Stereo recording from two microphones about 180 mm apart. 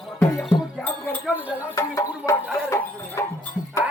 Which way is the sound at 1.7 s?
15° left (ahead or behind).